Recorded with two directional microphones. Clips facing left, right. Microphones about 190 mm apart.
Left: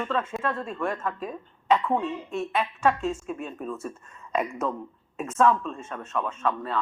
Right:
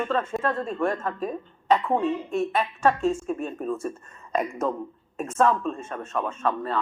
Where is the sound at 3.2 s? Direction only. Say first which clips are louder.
Right 5 dB; 40° right (ahead or behind).